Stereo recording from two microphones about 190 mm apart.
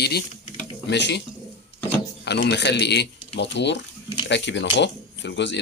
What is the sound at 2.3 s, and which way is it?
Speech, 60° left (ahead or behind).